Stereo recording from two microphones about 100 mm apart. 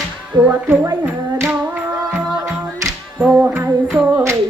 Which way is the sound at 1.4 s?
20° right (ahead or behind).